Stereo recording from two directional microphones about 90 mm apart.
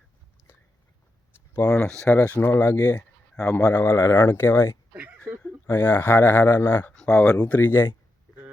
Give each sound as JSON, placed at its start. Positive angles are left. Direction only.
{"t": 1.5, "sound": "speech", "side_deg": 30}
{"t": 3.9, "sound": "speech", "side_deg": 45}
{"t": 4.3, "sound": "speech", "side_deg": 25}
{"t": 4.9, "sound": "a sound", "side_deg": -15}
{"t": 5.6, "sound": "speech", "side_deg": 25}
{"t": 6.9, "sound": "speech", "side_deg": 10}